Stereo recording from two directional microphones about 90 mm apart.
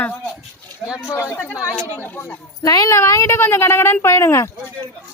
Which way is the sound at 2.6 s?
40° left (ahead or behind).